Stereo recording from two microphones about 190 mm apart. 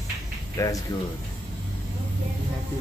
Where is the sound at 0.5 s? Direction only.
20° left (ahead or behind).